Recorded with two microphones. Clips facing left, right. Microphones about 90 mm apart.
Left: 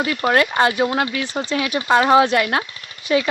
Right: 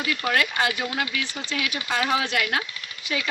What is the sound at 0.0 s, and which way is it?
Speech, 35° left (ahead or behind).